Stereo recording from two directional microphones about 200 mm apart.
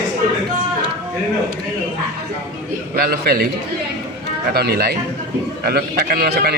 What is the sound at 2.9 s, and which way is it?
Speech, 50° right (ahead or behind).